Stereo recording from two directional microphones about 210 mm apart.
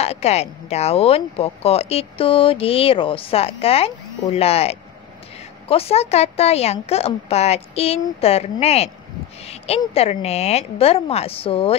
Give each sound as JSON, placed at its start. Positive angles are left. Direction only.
{"t": 0.0, "sound": "speech", "side_deg": 30}